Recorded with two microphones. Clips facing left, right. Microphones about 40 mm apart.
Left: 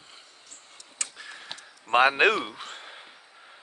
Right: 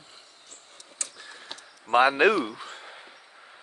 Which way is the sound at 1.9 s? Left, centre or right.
Left.